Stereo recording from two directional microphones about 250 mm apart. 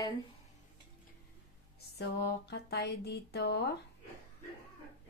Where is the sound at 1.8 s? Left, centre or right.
Left.